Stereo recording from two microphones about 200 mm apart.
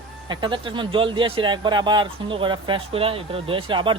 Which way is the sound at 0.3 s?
25° right (ahead or behind).